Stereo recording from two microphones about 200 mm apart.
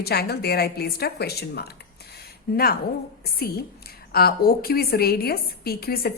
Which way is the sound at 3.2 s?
50° left (ahead or behind).